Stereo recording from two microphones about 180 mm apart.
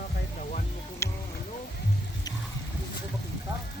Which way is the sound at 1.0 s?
15° left (ahead or behind).